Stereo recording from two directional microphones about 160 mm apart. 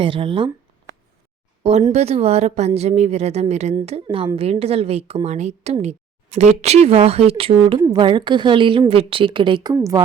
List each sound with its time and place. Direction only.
0.0 s speech: 35° right (ahead or behind)
1.9 s a woman's voice: 40° right (ahead or behind)
9.7 s a woman's voice: 20° right (ahead or behind)